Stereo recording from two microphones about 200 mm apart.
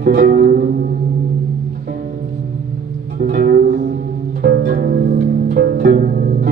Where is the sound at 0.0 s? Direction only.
45° right (ahead or behind).